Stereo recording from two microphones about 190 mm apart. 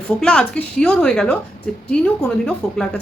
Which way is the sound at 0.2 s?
5° left (ahead or behind).